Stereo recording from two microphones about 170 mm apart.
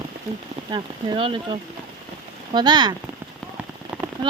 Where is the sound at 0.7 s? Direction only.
30° right (ahead or behind).